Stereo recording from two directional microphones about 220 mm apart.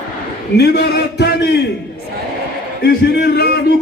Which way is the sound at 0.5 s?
50° left (ahead or behind).